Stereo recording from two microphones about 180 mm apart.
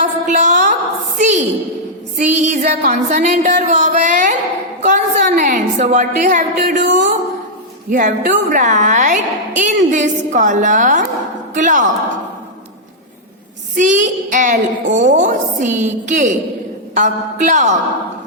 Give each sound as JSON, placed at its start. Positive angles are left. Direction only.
{"t": 0.0, "sound": "a sound", "side_deg": -45}
{"t": 2.1, "sound": "music", "side_deg": -40}
{"t": 4.8, "sound": "a woman's voice", "side_deg": -40}
{"t": 13.7, "sound": "a woman's voice", "side_deg": -45}
{"t": 16.9, "sound": "music", "side_deg": -45}